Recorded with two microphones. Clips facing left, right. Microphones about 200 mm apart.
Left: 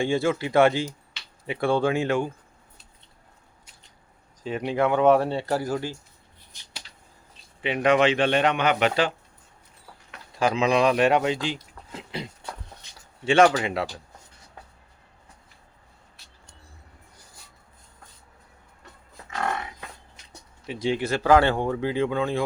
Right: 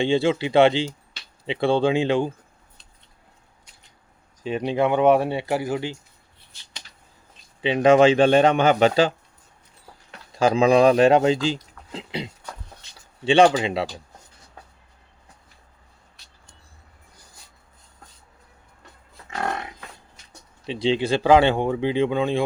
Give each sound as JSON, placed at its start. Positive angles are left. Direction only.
{"t": 0.1, "sound": "speech", "side_deg": -25}
{"t": 4.4, "sound": "speech", "side_deg": -20}
{"t": 7.6, "sound": "a man's voice", "side_deg": -30}
{"t": 20.7, "sound": "speech", "side_deg": -30}